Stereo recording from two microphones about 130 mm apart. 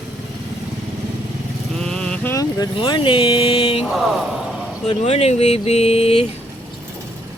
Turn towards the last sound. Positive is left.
turn(degrees=50)  # may be behind; listen again after turning